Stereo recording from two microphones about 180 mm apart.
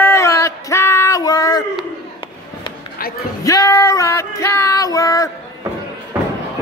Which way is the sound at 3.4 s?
20° left (ahead or behind).